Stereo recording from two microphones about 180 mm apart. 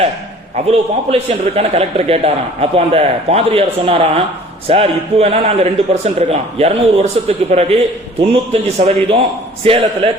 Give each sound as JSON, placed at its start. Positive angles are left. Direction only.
{"t": 0.5, "sound": "a man's voice", "side_deg": -35}